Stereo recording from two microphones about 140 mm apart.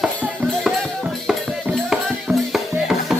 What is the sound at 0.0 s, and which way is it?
Music, 5° right (ahead or behind).